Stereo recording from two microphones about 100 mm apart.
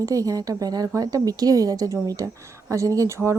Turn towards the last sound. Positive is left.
turn(degrees=-30)  # may be behind; listen again after turning